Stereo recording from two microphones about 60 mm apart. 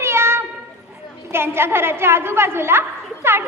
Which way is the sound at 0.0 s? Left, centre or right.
Right.